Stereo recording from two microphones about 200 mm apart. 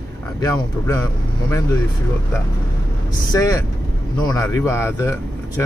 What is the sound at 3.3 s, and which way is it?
Speech, 20° left (ahead or behind).